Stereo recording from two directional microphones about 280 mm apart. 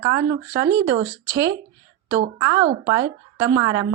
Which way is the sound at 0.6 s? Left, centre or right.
Right.